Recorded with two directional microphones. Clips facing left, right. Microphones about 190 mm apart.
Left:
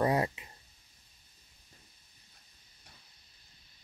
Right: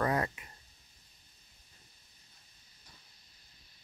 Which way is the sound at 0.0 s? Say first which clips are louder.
Left 3 dB; 20° left (ahead or behind).